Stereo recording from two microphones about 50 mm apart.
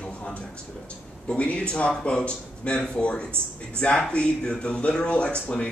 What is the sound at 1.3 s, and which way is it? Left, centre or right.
Speech, left.